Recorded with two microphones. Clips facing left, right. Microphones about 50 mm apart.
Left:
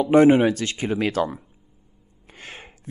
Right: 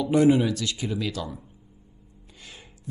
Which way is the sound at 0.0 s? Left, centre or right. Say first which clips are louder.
Left 5 dB; left.